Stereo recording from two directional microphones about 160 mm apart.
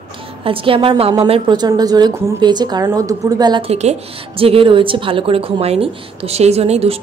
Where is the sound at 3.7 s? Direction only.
40° right (ahead or behind).